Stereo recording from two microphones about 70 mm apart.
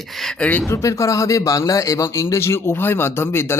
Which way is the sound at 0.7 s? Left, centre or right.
Left.